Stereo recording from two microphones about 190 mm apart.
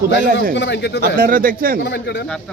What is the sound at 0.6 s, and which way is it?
Speech, 65° left (ahead or behind).